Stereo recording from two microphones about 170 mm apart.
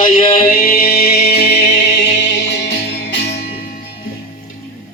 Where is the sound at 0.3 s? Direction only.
55° left (ahead or behind); by 3.3 s 85° left.